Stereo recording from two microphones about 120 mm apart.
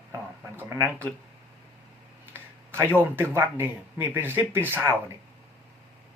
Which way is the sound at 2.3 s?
20° right (ahead or behind).